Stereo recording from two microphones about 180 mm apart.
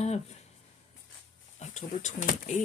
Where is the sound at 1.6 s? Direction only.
40° left (ahead or behind).